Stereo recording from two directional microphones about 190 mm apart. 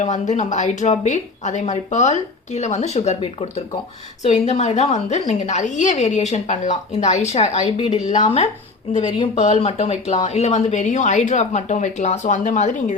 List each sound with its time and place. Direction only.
0.0 s speech: 40° left (ahead or behind)